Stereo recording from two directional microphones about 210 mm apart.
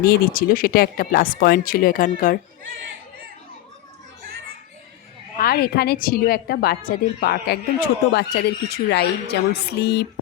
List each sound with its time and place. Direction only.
0.0 s speech: 45° left (ahead or behind)
5.4 s speech: 50° left (ahead or behind)